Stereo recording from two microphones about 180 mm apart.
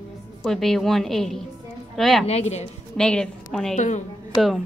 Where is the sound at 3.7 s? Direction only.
40° left (ahead or behind).